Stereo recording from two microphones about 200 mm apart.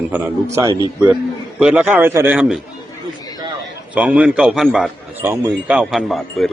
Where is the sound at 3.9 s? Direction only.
5° right (ahead or behind).